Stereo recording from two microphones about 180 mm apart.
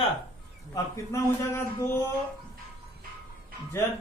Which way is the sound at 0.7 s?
15° left (ahead or behind).